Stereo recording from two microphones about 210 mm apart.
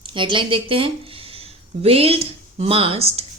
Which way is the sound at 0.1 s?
25° right (ahead or behind).